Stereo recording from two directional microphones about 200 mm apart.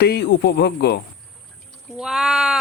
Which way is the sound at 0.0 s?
55° left (ahead or behind).